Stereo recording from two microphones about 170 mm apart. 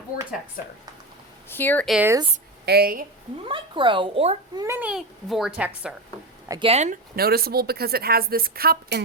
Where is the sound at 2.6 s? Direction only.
65° right (ahead or behind).